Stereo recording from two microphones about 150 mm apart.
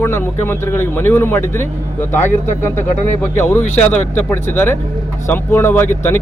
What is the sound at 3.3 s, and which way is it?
Speech, 15° left (ahead or behind).